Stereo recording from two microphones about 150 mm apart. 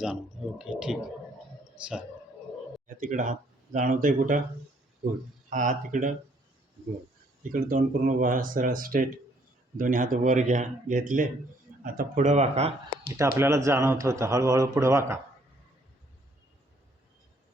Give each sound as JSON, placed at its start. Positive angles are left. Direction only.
{"t": 0.6, "sound": "speech", "side_deg": -5}
{"t": 2.8, "sound": "speech", "side_deg": -60}
{"t": 5.5, "sound": "speech", "side_deg": -60}
{"t": 7.5, "sound": "speech", "side_deg": -65}
{"t": 13.1, "sound": "speech", "side_deg": -20}